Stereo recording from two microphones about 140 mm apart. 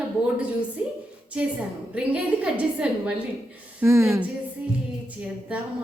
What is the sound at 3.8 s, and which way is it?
Speech, 20° right (ahead or behind).